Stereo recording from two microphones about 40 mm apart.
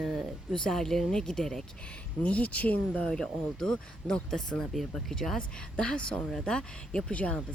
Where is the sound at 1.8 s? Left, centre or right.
Left.